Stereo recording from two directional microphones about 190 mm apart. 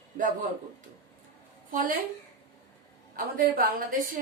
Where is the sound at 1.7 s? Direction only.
45° right (ahead or behind).